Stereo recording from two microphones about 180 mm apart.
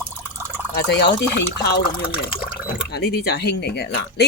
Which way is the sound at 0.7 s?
70° left (ahead or behind).